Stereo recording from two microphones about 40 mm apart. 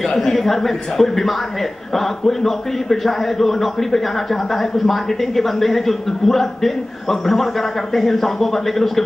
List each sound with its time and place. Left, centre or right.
0.0 s a man's voice: centre